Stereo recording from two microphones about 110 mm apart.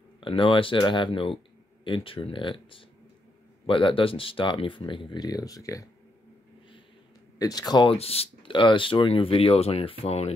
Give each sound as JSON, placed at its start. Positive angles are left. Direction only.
{"t": 0.2, "sound": "speech", "side_deg": 50}
{"t": 7.3, "sound": "speech", "side_deg": 35}
{"t": 7.9, "sound": "speech", "side_deg": 65}